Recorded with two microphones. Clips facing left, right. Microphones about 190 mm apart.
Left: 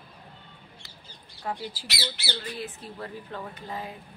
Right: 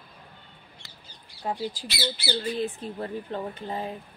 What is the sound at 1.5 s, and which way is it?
Speech, 20° right (ahead or behind).